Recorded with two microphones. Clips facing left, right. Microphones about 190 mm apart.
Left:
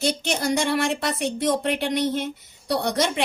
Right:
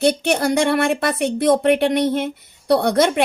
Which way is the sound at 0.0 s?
60° right (ahead or behind).